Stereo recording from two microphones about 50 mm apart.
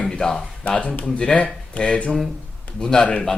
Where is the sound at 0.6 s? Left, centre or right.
Left.